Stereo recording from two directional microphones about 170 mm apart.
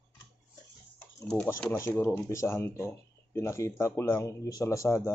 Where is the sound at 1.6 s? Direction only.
15° left (ahead or behind).